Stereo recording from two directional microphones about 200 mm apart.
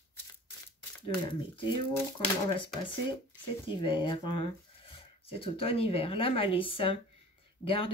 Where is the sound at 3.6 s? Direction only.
25° left (ahead or behind).